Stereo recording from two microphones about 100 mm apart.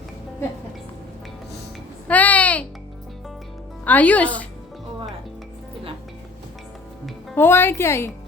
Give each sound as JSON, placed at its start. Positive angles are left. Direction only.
{"t": 2.0, "sound": "a sound", "side_deg": 15}
{"t": 3.8, "sound": "speech", "side_deg": 15}
{"t": 7.3, "sound": "speech", "side_deg": 25}